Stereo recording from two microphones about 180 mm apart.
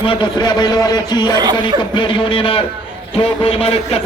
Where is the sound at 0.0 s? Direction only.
30° left (ahead or behind).